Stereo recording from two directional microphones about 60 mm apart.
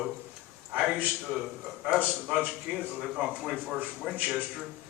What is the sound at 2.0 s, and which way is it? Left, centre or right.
Speech, right.